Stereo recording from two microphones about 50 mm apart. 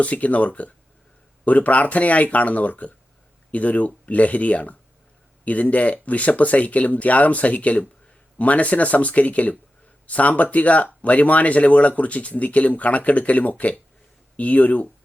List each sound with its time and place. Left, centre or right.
0.0 s speech: left